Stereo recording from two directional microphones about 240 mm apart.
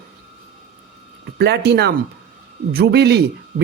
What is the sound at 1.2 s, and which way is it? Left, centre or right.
A man's voice, right.